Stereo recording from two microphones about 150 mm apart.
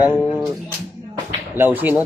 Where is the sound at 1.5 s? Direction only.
15° right (ahead or behind).